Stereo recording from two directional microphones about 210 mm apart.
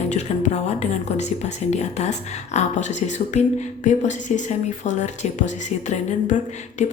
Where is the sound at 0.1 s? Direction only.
35° left (ahead or behind).